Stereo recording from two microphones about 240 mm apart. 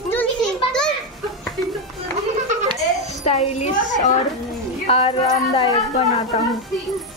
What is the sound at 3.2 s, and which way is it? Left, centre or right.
A woman's voice, left.